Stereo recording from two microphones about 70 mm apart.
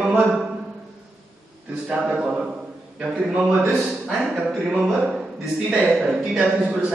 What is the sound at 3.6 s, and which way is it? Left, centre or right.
Speech, right.